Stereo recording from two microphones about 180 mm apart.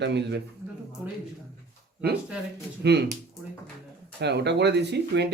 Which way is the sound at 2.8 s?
65° right (ahead or behind).